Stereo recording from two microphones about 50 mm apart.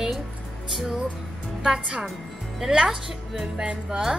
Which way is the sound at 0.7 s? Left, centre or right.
Centre.